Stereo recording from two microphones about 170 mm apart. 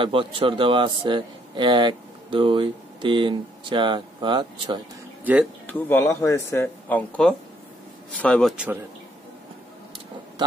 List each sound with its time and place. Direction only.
0.0 s a man's voice: 30° right (ahead or behind)
5.2 s speech: 10° right (ahead or behind)
5.7 s a man's voice: 10° left (ahead or behind)